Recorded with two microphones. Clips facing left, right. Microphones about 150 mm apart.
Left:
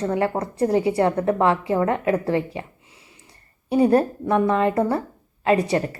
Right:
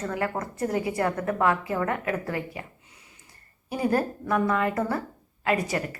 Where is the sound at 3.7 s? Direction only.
30° left (ahead or behind).